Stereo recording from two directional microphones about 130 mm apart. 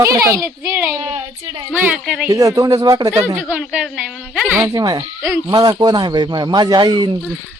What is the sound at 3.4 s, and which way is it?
A woman's voice, 5° right (ahead or behind).